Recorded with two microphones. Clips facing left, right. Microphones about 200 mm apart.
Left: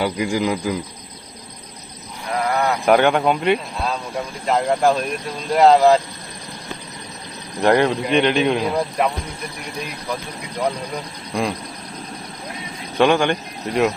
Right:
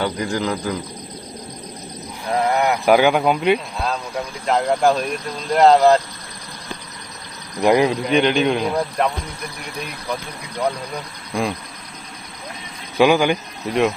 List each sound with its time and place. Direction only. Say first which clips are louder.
0.0 s a man's voice: left 2 dB; 10° left (ahead or behind)
2.3 s a sound: right 2 dB; 20° right (ahead or behind)
2.8 s a man's voice: even; 5° right (ahead or behind)
7.6 s a man's voice: even; 5° right (ahead or behind)
11.3 s a man's voice: even; centre (ahead or behind)
13.0 s speech: right 1 dB; 5° right (ahead or behind)